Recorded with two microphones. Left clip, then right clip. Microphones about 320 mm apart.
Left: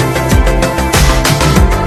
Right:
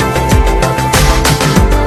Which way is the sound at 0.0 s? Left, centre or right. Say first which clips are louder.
Right 1 dB; centre.